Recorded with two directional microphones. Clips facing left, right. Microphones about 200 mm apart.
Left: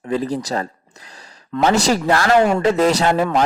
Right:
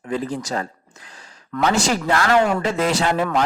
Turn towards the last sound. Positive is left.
turn(degrees=30)  # may be behind; listen again after turning